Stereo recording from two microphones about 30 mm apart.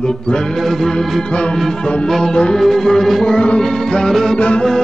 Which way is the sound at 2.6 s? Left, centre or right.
Centre.